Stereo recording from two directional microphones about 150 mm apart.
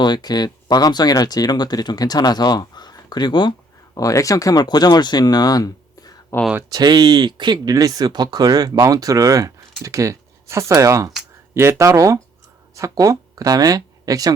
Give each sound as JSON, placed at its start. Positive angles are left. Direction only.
{"t": 0.0, "sound": "speech", "side_deg": 30}
{"t": 6.6, "sound": "speech", "side_deg": -25}